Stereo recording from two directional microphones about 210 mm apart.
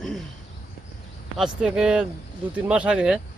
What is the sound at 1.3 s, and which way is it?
Speech, 5° right (ahead or behind).